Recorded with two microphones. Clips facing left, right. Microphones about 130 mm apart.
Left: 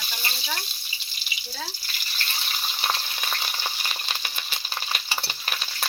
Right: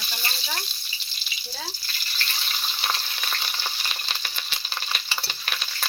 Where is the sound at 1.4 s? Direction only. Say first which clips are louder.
Even; 5° left (ahead or behind).